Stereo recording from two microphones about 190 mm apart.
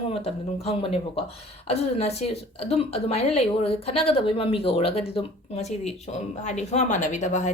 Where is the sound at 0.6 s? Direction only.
30° left (ahead or behind).